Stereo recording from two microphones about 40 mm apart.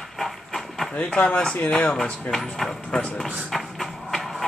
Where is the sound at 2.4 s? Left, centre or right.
Centre.